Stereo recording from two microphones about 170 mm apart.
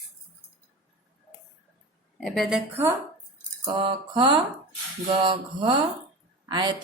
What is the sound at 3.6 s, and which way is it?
A woman's voice, 30° right (ahead or behind).